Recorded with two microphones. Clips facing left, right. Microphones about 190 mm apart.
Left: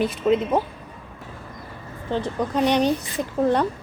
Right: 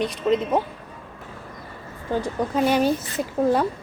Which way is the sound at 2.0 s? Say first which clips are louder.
Even; 10° right (ahead or behind).